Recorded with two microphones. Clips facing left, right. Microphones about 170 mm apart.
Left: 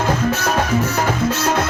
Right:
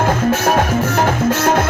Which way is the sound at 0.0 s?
55° right (ahead or behind).